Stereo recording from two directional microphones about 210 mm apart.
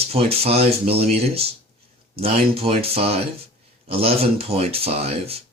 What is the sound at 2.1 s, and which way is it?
Speech, 25° right (ahead or behind).